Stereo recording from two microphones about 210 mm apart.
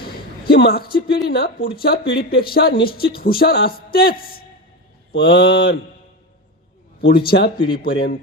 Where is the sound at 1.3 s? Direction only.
50° left (ahead or behind).